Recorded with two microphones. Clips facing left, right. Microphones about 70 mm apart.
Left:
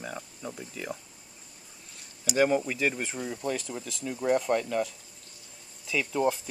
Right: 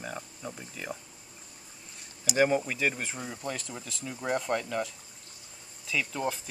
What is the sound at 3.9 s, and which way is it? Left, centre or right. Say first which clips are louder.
Speech: left 5 dB; centre.